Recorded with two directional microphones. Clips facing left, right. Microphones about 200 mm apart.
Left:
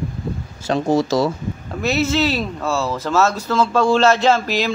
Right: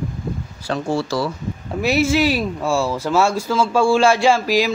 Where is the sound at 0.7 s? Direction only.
20° left (ahead or behind).